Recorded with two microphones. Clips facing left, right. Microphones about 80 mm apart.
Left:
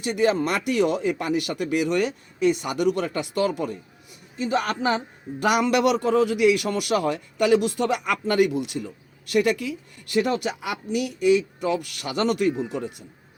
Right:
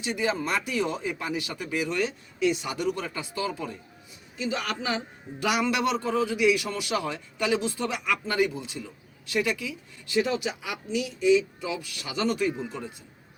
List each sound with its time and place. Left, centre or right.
0.0 s a man's voice: left
2.4 s a man's voice: left
4.4 s a man's voice: left
9.3 s a man's voice: left